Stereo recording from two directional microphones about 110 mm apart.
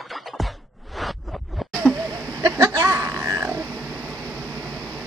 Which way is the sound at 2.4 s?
30° right (ahead or behind).